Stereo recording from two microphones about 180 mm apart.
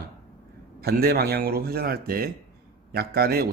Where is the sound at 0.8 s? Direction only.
60° right (ahead or behind).